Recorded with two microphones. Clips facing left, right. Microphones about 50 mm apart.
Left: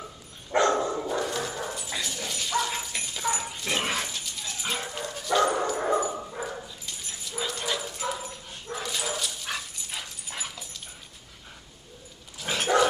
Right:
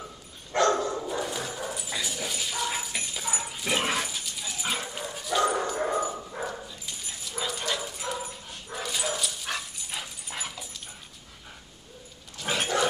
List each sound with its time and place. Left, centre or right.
0.5 s dog: centre
1.0 s dog: centre
5.7 s dog: centre
6.3 s dog: centre
12.4 s wild animals: centre